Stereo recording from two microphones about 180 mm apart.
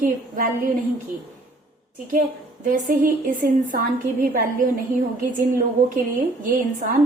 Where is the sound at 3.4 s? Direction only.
45° right (ahead or behind).